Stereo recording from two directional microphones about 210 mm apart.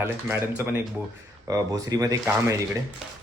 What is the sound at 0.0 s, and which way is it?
Speech, 10° right (ahead or behind).